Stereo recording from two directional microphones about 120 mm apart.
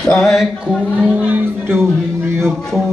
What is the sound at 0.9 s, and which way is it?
Speech, 10° right (ahead or behind).